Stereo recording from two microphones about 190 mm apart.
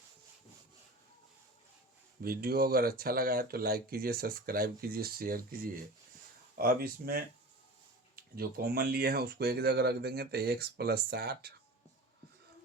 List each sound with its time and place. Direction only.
2.2 s speech: 50° right (ahead or behind)